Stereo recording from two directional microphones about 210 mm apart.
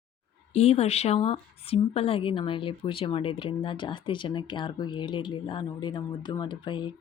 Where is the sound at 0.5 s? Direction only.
30° left (ahead or behind).